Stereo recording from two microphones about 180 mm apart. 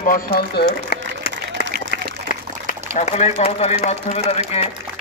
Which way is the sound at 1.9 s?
45° left (ahead or behind).